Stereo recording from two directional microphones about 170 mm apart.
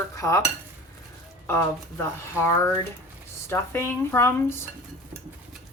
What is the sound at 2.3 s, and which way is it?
Speech, 15° left (ahead or behind).